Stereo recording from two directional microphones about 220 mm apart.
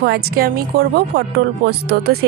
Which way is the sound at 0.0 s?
45° right (ahead or behind).